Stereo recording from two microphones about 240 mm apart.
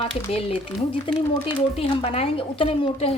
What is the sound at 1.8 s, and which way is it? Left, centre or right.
A woman's voice, left.